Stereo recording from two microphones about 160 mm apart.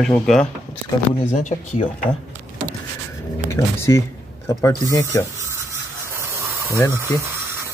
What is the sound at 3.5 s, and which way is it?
Speech, 15° left (ahead or behind).